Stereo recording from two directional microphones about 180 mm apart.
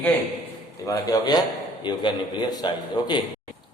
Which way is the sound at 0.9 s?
20° left (ahead or behind).